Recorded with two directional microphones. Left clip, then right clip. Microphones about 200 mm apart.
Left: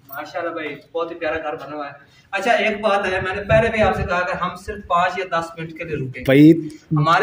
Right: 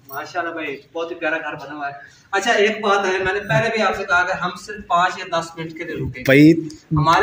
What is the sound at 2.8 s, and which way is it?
Speech, 40° left (ahead or behind).